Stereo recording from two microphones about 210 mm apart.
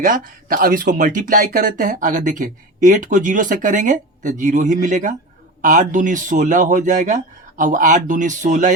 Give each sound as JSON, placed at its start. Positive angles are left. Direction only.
{"t": 0.0, "sound": "speech", "side_deg": -40}